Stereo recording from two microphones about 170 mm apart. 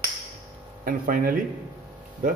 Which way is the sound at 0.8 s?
55° right (ahead or behind).